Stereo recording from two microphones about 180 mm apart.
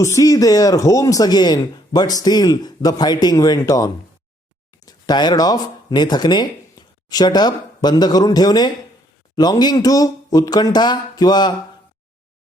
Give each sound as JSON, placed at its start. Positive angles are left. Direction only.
{"t": 0.0, "sound": "speech", "side_deg": 20}